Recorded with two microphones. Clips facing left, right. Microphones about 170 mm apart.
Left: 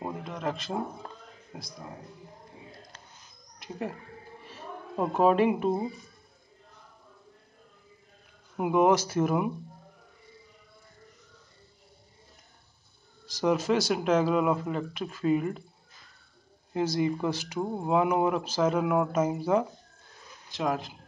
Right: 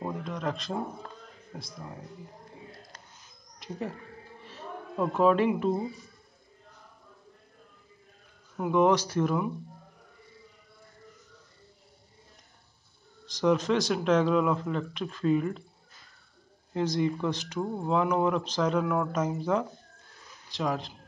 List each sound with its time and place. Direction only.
0.0 s a sound: 5° left (ahead or behind)
1.5 s speech: 5° left (ahead or behind)
3.5 s a sound: centre (ahead or behind)
4.9 s speech: 30° left (ahead or behind)
5.2 s speech: 10° left (ahead or behind)
8.5 s speech: 10° left (ahead or behind)
13.2 s speech: 5° left (ahead or behind)
16.7 s speech: 5° left (ahead or behind)